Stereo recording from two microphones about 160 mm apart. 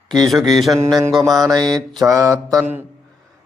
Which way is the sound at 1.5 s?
25° right (ahead or behind).